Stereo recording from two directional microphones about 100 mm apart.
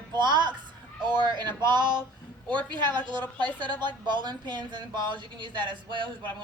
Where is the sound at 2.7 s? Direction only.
50° right (ahead or behind).